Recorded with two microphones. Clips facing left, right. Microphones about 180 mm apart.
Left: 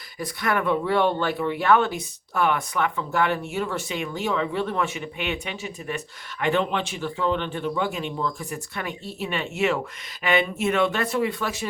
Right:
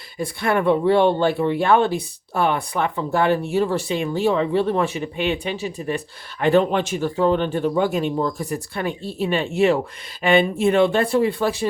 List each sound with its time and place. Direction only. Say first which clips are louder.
0.2 s speech: right 5 dB; 30° right (ahead or behind)